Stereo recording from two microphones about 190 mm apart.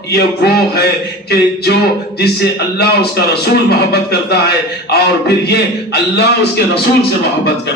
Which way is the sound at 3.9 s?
60° left (ahead or behind).